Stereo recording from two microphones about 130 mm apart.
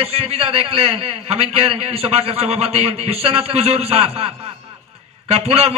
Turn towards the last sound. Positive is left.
turn(degrees=-50)  # may be behind; listen again after turning